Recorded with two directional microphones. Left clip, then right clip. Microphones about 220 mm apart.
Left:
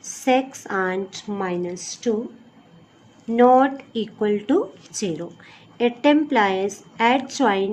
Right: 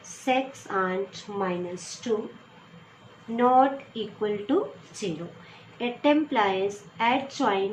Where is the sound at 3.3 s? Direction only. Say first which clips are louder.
Left 5 dB; 60° left (ahead or behind).